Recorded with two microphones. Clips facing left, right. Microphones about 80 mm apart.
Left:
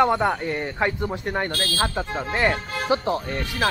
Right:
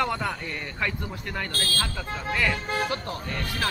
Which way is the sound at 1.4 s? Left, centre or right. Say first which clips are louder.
Left 5 dB; left.